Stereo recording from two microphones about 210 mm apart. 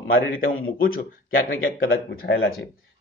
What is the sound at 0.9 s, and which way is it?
Speech, 45° left (ahead or behind).